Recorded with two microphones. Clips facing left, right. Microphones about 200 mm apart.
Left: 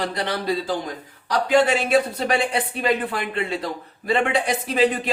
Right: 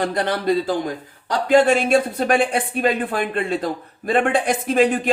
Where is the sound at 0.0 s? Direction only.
50° right (ahead or behind).